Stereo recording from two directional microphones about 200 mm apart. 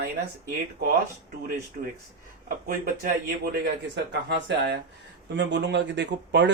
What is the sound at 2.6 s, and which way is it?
Speech, 45° right (ahead or behind).